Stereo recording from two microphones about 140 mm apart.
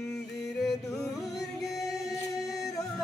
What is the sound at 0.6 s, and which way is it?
Music, centre (ahead or behind).